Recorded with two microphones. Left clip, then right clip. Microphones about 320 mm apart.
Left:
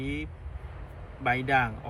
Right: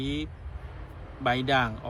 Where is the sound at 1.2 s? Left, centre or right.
Centre.